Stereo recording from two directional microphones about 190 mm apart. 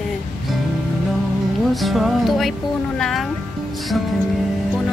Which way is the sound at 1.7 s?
Centre (ahead or behind).